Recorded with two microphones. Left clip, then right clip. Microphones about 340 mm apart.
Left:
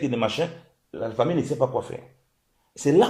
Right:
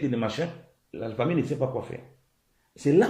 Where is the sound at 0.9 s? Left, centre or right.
Left.